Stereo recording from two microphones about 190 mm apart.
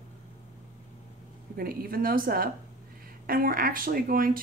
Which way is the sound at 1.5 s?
50° right (ahead or behind).